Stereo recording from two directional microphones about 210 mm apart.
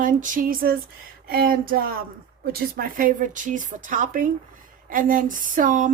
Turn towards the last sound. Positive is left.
turn(degrees=-40)  # may be behind; listen again after turning